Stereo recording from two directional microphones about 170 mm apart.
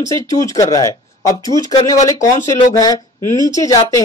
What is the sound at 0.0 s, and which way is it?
A woman's voice, 20° left (ahead or behind).